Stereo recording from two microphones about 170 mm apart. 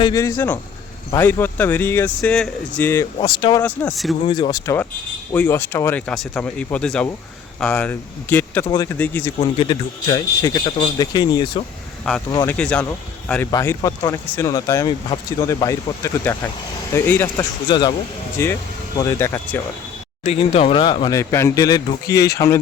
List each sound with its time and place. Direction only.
0.0 s speech: 20° left (ahead or behind)
3.2 s speech: 25° left (ahead or behind)
3.6 s speech: 10° left (ahead or behind)
4.3 s speech: 25° left (ahead or behind)
8.7 s speech: 20° left (ahead or behind)
9.4 s speech: 25° left (ahead or behind)
12.5 s speech: 5° left (ahead or behind)
13.5 s speech: 20° left (ahead or behind)
17.7 s speech: 25° left (ahead or behind)
20.2 s speech: 35° left (ahead or behind); by 22.5 s 20° left (ahead or behind)